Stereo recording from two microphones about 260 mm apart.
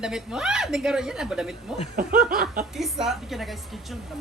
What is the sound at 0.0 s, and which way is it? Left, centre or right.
A woman's voice, centre.